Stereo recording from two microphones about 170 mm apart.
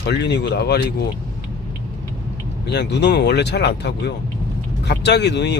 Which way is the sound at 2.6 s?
85° left.